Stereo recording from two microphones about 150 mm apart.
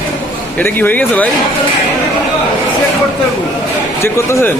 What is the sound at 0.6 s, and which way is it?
Speech, 10° left (ahead or behind).